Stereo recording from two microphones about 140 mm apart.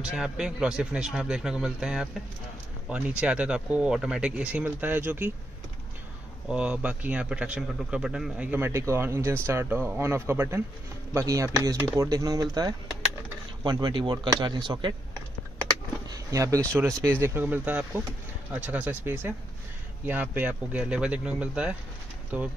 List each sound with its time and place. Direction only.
0.0 s a man's voice: 5° right (ahead or behind)
6.5 s a man's voice: 10° right (ahead or behind); by 15.0 s 35° right (ahead or behind)
16.1 s a man's voice: 25° right (ahead or behind)